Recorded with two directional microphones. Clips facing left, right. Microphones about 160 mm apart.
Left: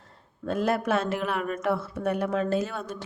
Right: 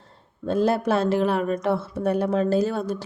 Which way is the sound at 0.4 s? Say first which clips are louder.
Right 4 dB; 30° right (ahead or behind).